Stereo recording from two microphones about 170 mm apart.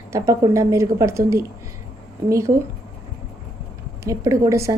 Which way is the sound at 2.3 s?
20° right (ahead or behind).